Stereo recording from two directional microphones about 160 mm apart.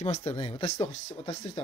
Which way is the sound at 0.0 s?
40° left (ahead or behind).